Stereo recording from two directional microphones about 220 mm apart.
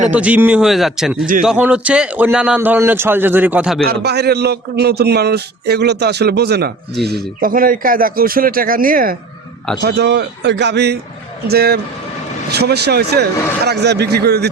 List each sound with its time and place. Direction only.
0.1 s a man's voice: 5° right (ahead or behind)
3.8 s a man's voice: 50° right (ahead or behind)